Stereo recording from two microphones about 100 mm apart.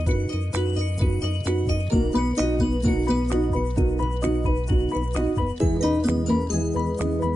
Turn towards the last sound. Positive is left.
turn(degrees=-5)  # may be behind; listen again after turning